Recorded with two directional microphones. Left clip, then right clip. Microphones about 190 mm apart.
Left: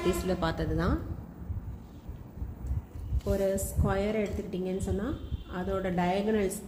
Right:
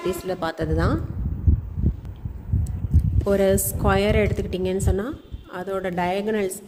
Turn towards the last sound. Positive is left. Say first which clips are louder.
# right 5 dB
turn(degrees=-55)  # may be behind; listen again after turning